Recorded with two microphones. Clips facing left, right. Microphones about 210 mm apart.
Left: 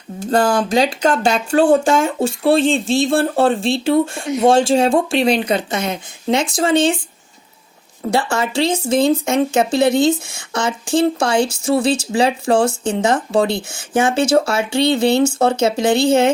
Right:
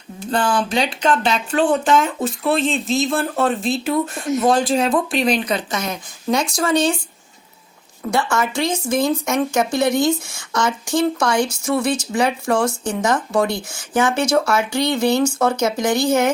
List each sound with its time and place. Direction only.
0.2 s speech: 40° left (ahead or behind)
2.0 s speech: 30° left (ahead or behind)
8.1 s speech: 30° left (ahead or behind)